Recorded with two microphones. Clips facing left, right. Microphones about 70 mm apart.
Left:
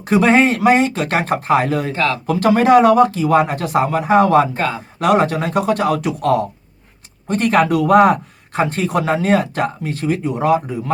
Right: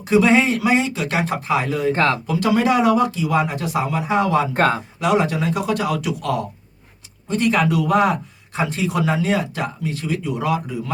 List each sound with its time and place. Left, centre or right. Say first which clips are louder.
0.0 s a man's voice: left 2 dB; left
1.9 s speech: right 1 dB; right
2.2 s a man's voice: left 4 dB; left
4.5 s speech: right 3 dB; right
4.9 s a man's voice: left 8 dB; left